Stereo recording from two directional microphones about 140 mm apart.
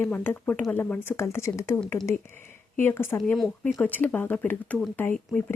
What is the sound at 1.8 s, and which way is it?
Speech, 5° left (ahead or behind).